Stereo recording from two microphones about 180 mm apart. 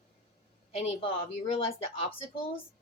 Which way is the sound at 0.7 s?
35° left (ahead or behind).